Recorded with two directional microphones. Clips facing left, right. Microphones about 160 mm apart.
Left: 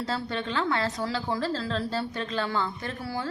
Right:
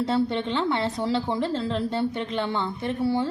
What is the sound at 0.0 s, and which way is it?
A woman's voice, 25° right (ahead or behind).